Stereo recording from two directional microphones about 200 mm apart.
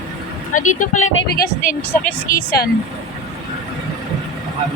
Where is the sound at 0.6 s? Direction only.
40° left (ahead or behind).